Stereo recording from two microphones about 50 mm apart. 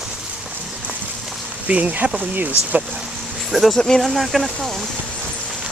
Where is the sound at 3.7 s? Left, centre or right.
Centre.